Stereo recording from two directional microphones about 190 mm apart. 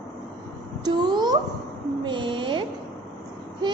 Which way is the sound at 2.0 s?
25° right (ahead or behind).